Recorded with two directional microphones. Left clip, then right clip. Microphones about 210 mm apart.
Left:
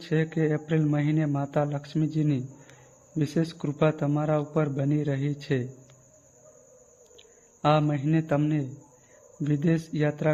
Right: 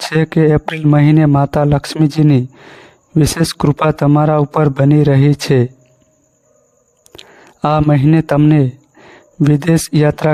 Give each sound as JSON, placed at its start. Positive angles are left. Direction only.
{"t": 0.1, "sound": "a man's voice", "side_deg": -50}
{"t": 7.1, "sound": "a sound", "side_deg": -50}
{"t": 7.6, "sound": "a man's voice", "side_deg": -50}